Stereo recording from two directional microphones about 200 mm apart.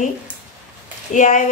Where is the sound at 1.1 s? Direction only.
40° left (ahead or behind).